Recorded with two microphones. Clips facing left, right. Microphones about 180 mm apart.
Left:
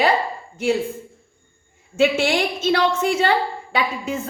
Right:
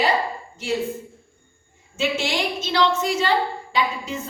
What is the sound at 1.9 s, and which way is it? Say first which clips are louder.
A woman's voice: left 6 dB; 55° left (ahead or behind).